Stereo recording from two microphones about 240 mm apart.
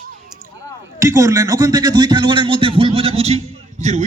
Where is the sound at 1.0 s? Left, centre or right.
Centre.